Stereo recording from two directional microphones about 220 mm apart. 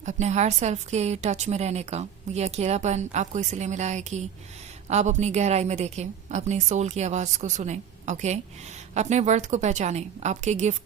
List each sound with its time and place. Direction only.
0.0 s a woman's voice: 35° right (ahead or behind)